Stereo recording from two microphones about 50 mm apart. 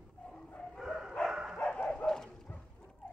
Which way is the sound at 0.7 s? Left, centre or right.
Centre.